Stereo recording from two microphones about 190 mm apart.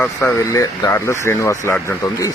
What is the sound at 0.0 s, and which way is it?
Speech, 10° left (ahead or behind).